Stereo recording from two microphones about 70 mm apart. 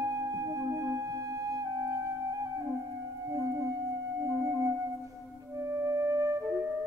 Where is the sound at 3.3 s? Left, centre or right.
Right.